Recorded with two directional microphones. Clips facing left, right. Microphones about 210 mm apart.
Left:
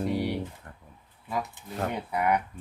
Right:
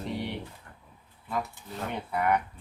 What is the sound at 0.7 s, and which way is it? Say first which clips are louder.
Speech: left 4 dB; 45° left (ahead or behind).